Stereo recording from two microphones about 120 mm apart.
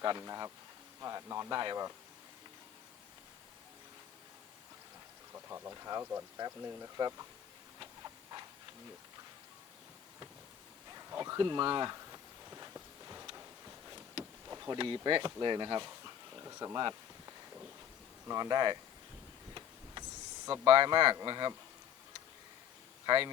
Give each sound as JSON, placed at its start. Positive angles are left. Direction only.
{"t": 0.0, "sound": "speech", "side_deg": -35}
{"t": 5.3, "sound": "speech", "side_deg": -20}
{"t": 6.9, "sound": "speech", "side_deg": -30}
{"t": 7.8, "sound": "a sound", "side_deg": -35}
{"t": 10.9, "sound": "a sound", "side_deg": -30}
{"t": 14.4, "sound": "speech", "side_deg": -30}
{"t": 19.5, "sound": "power windows", "side_deg": -35}
{"t": 20.7, "sound": "speech", "side_deg": -40}
{"t": 23.0, "sound": "speech", "side_deg": -40}